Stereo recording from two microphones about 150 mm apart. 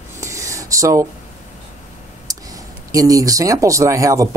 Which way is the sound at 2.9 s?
20° right (ahead or behind).